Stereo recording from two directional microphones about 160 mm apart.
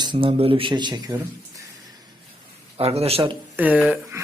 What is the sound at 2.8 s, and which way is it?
Speech, 40° right (ahead or behind).